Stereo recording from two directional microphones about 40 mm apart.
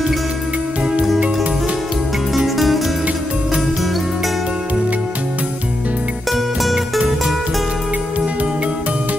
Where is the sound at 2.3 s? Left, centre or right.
Centre.